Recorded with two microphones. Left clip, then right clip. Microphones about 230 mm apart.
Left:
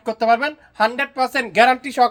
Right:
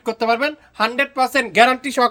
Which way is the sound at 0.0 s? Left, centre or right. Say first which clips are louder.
Left 1 dB; right.